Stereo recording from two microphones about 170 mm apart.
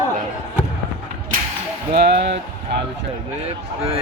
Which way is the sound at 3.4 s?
35° right (ahead or behind).